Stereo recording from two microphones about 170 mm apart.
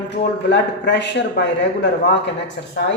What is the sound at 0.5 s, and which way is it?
Speech, 90° left.